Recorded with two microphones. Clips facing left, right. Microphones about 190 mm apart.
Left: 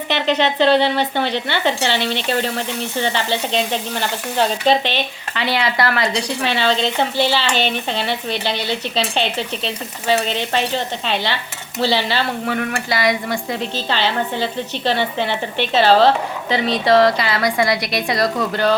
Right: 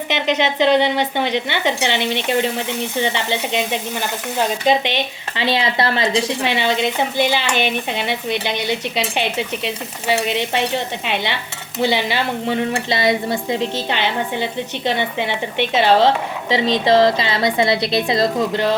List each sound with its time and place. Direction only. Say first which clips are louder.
0.1 s a woman's voice: left 1 dB; 15° right (ahead or behind)